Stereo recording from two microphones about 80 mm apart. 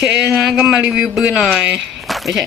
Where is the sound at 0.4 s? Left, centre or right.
Centre.